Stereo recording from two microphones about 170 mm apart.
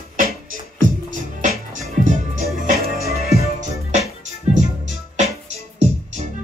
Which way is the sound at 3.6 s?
45° right (ahead or behind).